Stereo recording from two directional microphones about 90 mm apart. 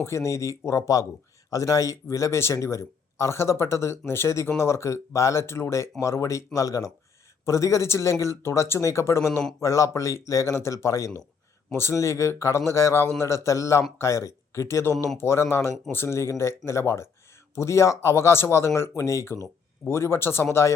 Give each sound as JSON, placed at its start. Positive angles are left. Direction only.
{"t": 0.0, "sound": "speech", "side_deg": 30}